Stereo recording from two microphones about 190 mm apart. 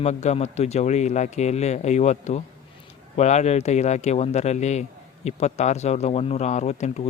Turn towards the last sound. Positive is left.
turn(degrees=35)  # may be behind; listen again after turning